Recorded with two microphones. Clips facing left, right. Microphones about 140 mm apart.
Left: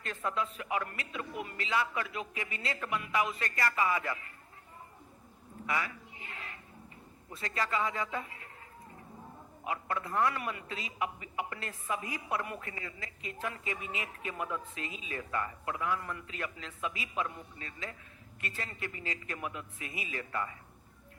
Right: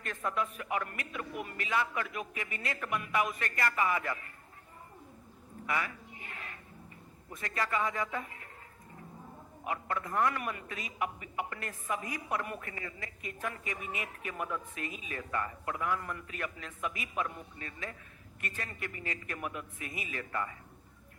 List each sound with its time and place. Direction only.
0.0 s a woman's voice: 20° left (ahead or behind)
5.6 s a woman's voice: 20° left (ahead or behind)
7.3 s a woman's voice: 20° left (ahead or behind)
10.3 s a woman's voice: 25° left (ahead or behind)